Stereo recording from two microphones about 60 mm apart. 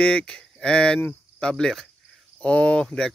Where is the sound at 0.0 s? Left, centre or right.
Centre.